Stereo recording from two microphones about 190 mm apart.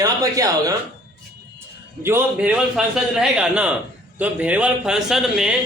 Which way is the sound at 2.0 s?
10° right (ahead or behind).